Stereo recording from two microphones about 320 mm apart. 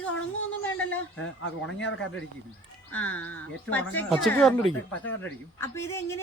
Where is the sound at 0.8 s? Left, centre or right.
Centre.